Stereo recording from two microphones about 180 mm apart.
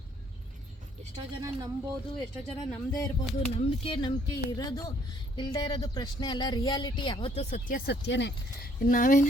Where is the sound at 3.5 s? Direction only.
30° left (ahead or behind).